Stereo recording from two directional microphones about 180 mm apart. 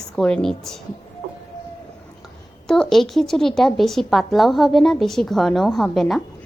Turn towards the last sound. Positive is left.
turn(degrees=0)  # may be behind; listen again after turning